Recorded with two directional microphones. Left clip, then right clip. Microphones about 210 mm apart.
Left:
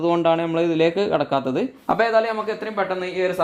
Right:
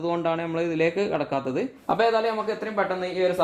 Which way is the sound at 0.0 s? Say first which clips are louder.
Left 7 dB; 40° left (ahead or behind).